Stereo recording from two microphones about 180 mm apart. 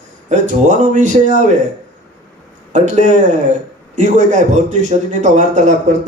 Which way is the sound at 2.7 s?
40° right (ahead or behind).